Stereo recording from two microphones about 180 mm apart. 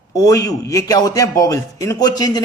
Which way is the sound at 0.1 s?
20° left (ahead or behind).